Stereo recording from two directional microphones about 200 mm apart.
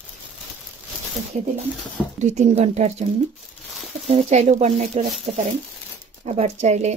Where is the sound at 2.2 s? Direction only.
35° right (ahead or behind).